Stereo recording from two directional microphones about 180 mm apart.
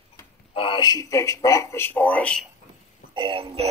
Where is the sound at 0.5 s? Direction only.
30° left (ahead or behind); by 2.5 s 5° left (ahead or behind).